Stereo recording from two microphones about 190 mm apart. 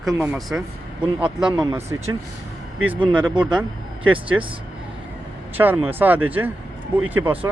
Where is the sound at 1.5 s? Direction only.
20° right (ahead or behind).